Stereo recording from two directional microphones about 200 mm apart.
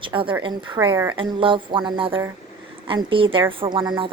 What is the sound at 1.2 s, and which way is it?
A woman's voice, 25° right (ahead or behind).